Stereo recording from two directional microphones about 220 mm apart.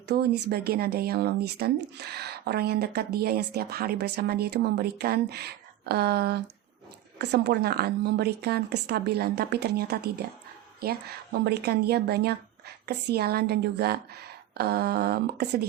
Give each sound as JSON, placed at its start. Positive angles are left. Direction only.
{"t": 0.1, "sound": "a woman's voice", "side_deg": -50}